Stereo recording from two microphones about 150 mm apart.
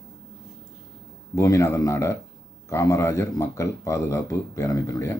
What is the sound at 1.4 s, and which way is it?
Speech, 20° left (ahead or behind).